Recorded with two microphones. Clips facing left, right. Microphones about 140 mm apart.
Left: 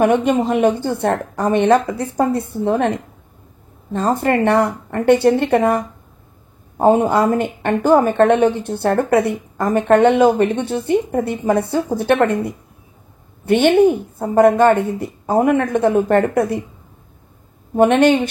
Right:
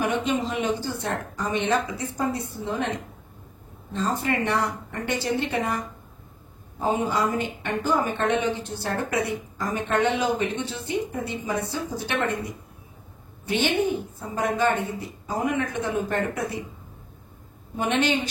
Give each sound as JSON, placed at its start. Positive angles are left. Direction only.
{"t": 0.0, "sound": "speech", "side_deg": 55}
{"t": 3.9, "sound": "speech", "side_deg": 55}
{"t": 17.7, "sound": "speech", "side_deg": 55}